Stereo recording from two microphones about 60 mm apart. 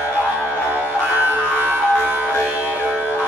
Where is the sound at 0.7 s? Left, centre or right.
Right.